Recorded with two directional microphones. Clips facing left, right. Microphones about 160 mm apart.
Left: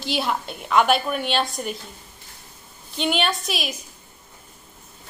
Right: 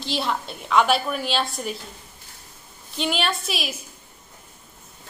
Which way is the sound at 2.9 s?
Centre (ahead or behind).